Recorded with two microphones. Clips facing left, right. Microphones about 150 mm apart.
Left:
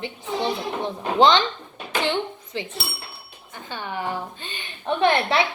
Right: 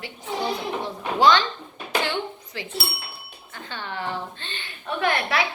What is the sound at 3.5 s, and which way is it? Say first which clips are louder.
A woman's voice: left 2 dB; 15° left (ahead or behind).